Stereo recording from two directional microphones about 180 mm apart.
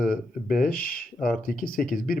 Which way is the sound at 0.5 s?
50° left (ahead or behind).